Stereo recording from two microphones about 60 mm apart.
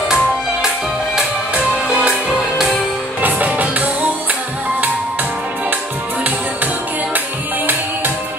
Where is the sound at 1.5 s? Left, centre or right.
Right.